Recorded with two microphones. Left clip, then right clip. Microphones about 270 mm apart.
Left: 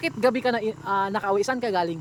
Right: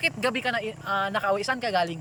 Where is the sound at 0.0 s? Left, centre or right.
Centre.